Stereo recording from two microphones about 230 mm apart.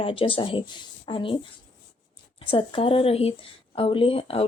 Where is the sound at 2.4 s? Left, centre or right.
Left.